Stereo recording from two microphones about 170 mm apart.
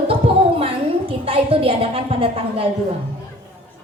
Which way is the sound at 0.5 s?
35° right (ahead or behind).